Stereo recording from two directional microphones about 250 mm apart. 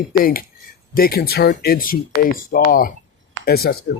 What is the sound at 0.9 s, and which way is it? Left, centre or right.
Speech, left.